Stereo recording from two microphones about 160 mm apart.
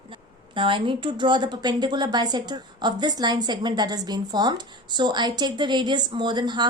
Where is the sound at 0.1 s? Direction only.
30° right (ahead or behind).